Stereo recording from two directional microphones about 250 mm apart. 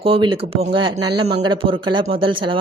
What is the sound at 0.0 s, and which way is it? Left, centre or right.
A woman's voice, right.